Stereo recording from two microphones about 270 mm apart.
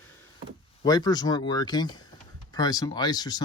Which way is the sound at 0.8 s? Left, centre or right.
Centre.